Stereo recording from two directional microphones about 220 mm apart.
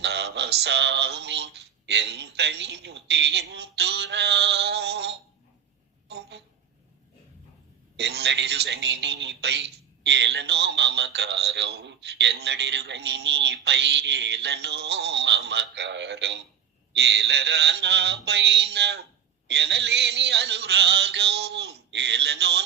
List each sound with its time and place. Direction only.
0.0 s a man's voice: 50° right (ahead or behind)
6.1 s a sound: 50° right (ahead or behind)
7.9 s a man's voice: 50° right (ahead or behind)